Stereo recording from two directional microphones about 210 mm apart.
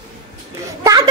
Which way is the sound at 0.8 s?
20° right (ahead or behind).